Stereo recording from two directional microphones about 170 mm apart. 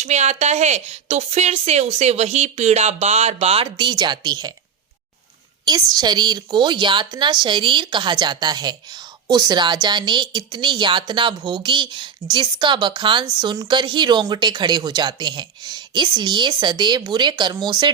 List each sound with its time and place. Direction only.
0.0 s a woman's voice: 40° right (ahead or behind); by 4.5 s 25° right (ahead or behind)
5.6 s a woman's voice: 25° right (ahead or behind)